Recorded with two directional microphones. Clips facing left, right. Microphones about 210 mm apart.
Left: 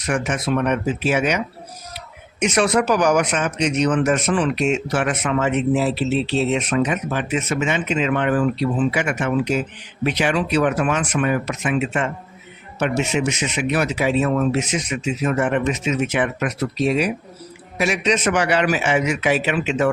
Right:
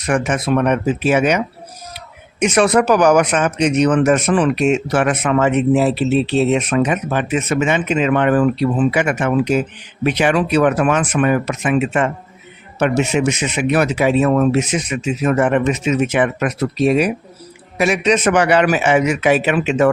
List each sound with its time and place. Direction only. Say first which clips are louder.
0.1 s speech: right 4 dB; 55° right (ahead or behind)
2.4 s speech: right 4 dB; 55° right (ahead or behind)